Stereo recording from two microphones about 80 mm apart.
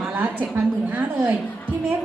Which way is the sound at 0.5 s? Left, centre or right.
Right.